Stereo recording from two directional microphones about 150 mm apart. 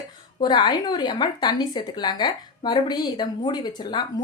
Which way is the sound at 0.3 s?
30° left (ahead or behind).